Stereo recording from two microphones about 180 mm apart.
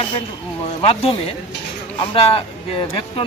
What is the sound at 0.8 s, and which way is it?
Speech, 30° left (ahead or behind).